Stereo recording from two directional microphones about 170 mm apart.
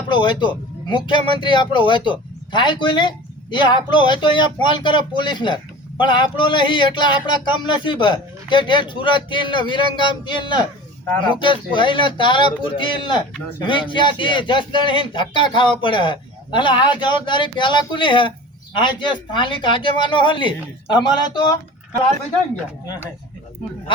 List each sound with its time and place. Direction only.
0.1 s speech: 25° left (ahead or behind)